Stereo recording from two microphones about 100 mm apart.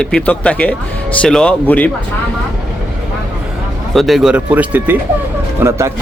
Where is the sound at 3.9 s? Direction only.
Centre (ahead or behind); by 5.8 s 20° right (ahead or behind).